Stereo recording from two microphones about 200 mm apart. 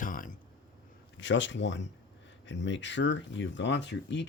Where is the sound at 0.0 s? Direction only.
40° left (ahead or behind).